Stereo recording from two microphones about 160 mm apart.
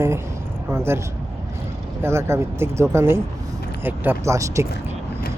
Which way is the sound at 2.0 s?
15° right (ahead or behind).